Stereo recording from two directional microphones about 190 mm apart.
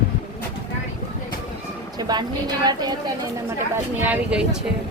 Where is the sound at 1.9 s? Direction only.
20° right (ahead or behind).